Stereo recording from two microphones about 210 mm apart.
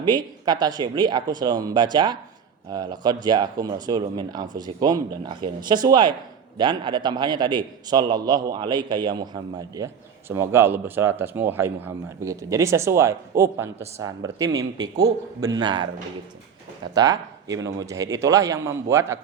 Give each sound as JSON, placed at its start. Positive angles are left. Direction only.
{"t": 0.0, "sound": "a man's voice", "side_deg": -20}
{"t": 16.9, "sound": "a man's voice", "side_deg": -20}